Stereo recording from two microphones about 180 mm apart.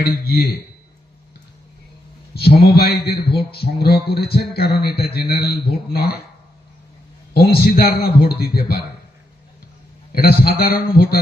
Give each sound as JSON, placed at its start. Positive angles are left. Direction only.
{"t": 0.0, "sound": "a man's voice", "side_deg": 60}
{"t": 2.3, "sound": "a man's voice", "side_deg": 60}
{"t": 7.3, "sound": "a man's voice", "side_deg": 60}
{"t": 10.2, "sound": "a man's voice", "side_deg": 55}